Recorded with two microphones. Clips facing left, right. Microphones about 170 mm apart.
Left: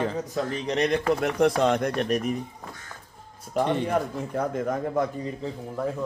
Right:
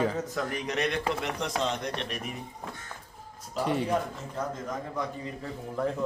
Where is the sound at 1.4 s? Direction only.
55° left (ahead or behind).